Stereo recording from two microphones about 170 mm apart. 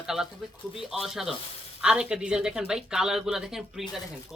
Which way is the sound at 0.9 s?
Centre (ahead or behind).